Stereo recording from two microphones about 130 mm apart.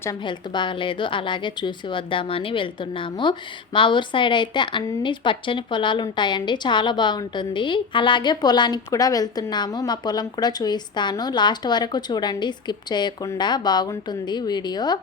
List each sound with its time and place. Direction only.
0.3 s a woman's voice: 40° left (ahead or behind)